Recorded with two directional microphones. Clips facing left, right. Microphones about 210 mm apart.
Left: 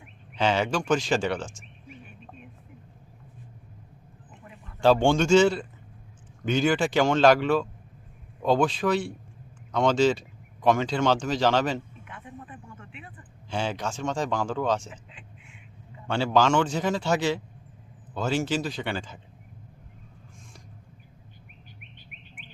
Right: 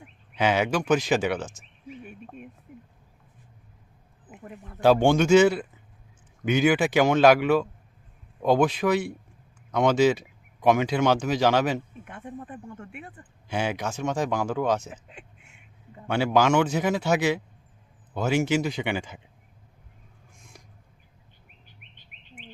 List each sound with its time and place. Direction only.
0.3 s speech: 10° right (ahead or behind)
4.3 s a sound: 55° right (ahead or behind)
4.8 s speech: 10° right (ahead or behind)
12.0 s speech: 45° right (ahead or behind)
13.5 s speech: 10° right (ahead or behind)
14.8 s speech: 45° right (ahead or behind)
16.0 s speech: 10° right (ahead or behind)